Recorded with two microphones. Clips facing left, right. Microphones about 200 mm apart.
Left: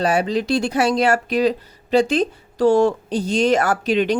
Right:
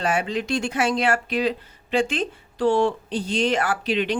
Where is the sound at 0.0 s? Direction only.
35° left (ahead or behind).